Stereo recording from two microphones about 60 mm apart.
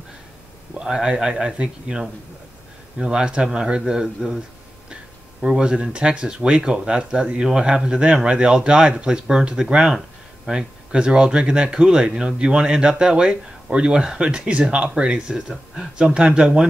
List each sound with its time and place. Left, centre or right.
0.7 s speech: centre
5.4 s speech: centre